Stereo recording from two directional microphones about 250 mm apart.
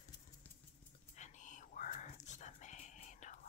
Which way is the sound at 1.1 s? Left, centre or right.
Left.